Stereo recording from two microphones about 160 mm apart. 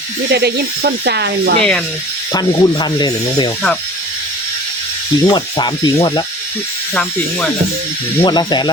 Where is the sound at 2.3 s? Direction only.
25° left (ahead or behind).